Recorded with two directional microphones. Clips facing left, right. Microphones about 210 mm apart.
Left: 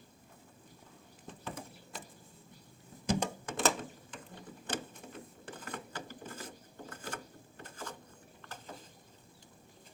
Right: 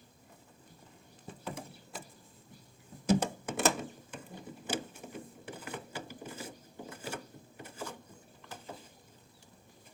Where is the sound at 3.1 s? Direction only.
5° right (ahead or behind).